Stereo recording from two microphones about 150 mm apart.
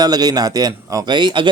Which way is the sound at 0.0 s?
25° right (ahead or behind).